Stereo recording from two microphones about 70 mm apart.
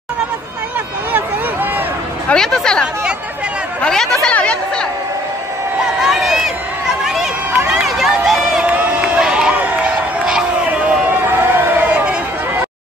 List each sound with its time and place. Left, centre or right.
2.2 s a woman's voice: centre
4.3 s chatter: centre
6.0 s a sound: centre
7.5 s run: right
7.8 s run: centre
8.5 s run: centre
10.2 s a sound: centre
11.1 s a sound: right
11.9 s chatter: centre